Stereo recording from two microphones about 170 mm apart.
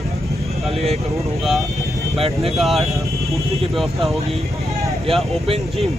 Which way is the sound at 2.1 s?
35° right (ahead or behind).